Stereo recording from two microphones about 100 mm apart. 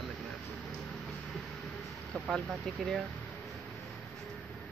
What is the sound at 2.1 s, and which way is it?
Speech, centre (ahead or behind).